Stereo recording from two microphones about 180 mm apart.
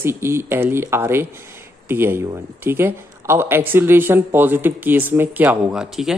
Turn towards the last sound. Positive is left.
turn(degrees=-5)  # may be behind; listen again after turning